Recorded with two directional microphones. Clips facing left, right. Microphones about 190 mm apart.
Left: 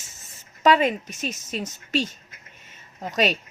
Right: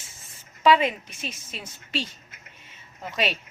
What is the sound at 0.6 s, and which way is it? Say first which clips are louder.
A woman's voice: left 1 dB; 45° left (ahead or behind).